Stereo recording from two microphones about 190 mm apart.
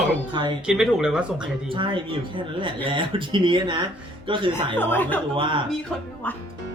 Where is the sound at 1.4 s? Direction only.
25° right (ahead or behind).